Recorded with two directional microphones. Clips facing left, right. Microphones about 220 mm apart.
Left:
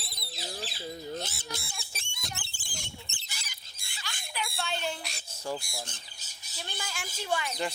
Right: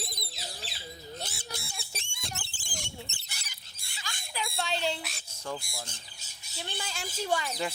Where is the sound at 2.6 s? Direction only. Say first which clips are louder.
Right 5 dB; 55° right (ahead or behind).